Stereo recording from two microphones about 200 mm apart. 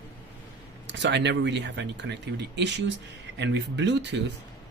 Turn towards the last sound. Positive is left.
turn(degrees=-60)  # may be behind; listen again after turning